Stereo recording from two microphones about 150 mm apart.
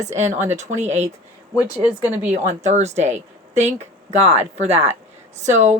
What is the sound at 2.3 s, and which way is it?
Speech, 50° right (ahead or behind).